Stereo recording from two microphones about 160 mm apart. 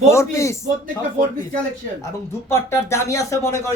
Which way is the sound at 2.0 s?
15° left (ahead or behind).